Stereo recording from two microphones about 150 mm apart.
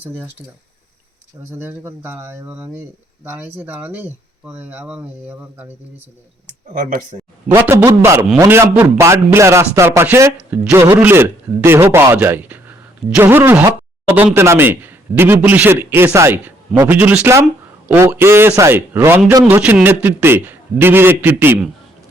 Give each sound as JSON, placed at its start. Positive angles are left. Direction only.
{"t": 1.5, "sound": "speech", "side_deg": -15}
{"t": 6.7, "sound": "speech", "side_deg": -60}
{"t": 7.4, "sound": "a man's voice", "side_deg": -15}